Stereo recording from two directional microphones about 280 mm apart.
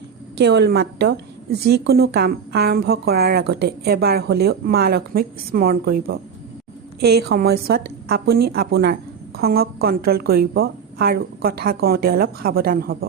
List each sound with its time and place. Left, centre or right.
0.3 s a woman's voice: right